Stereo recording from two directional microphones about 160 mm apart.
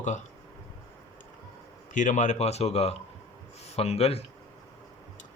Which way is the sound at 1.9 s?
50° left (ahead or behind).